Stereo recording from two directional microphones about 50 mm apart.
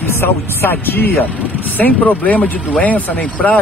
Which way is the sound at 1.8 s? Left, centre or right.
Left.